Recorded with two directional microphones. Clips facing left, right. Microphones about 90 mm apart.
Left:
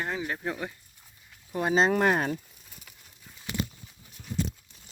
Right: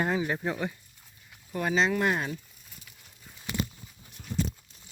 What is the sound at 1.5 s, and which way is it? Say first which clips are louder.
Speech: left 2 dB; 20° left (ahead or behind).